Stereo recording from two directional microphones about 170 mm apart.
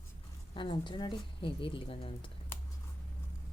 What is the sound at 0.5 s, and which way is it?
A woman's voice, 30° left (ahead or behind).